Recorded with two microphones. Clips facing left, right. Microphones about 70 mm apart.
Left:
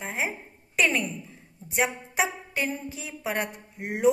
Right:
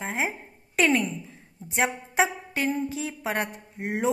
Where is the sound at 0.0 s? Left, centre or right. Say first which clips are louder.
Right 2 dB; right.